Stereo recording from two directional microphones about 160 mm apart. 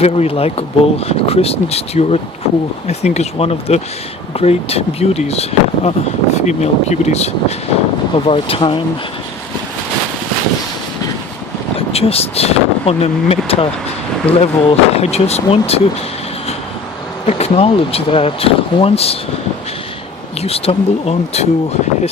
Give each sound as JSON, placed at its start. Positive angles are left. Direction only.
{"t": 0.0, "sound": "speech", "side_deg": 40}
{"t": 11.9, "sound": "speech", "side_deg": 40}
{"t": 17.2, "sound": "speech", "side_deg": 40}
{"t": 20.4, "sound": "speech", "side_deg": 40}